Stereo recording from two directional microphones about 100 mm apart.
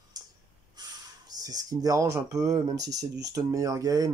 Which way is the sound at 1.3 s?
40° right (ahead or behind).